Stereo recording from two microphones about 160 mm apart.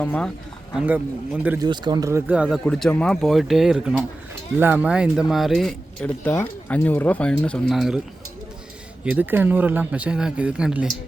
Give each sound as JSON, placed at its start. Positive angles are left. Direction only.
{"t": 0.0, "sound": "speech", "side_deg": 10}
{"t": 0.8, "sound": "speech", "side_deg": -10}
{"t": 1.5, "sound": "speech", "side_deg": -25}
{"t": 9.0, "sound": "speech", "side_deg": -10}